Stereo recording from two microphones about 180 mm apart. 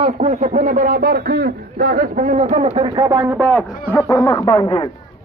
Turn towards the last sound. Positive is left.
turn(degrees=25)  # may be behind; listen again after turning